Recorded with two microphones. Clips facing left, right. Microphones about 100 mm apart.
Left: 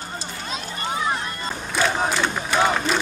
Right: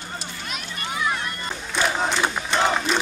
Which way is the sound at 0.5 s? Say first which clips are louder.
Left 4 dB; 30° left (ahead or behind).